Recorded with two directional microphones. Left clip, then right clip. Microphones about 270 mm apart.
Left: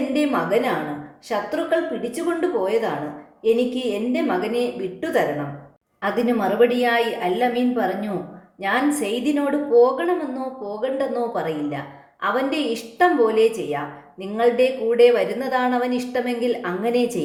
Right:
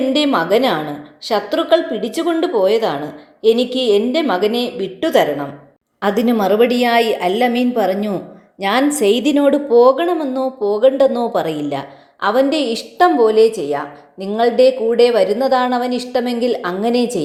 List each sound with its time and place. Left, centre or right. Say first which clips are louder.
0.1 s a woman's voice: right 5 dB; right